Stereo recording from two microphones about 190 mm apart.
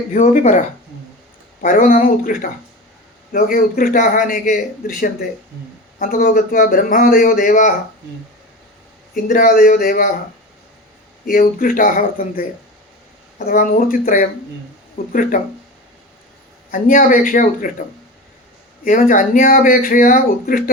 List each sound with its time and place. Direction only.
0.1 s speech: 40° left (ahead or behind)
1.6 s speech: 45° left (ahead or behind)
9.1 s speech: 45° left (ahead or behind)
11.3 s speech: 45° left (ahead or behind)
16.7 s speech: 45° left (ahead or behind)
18.9 s speech: 45° left (ahead or behind)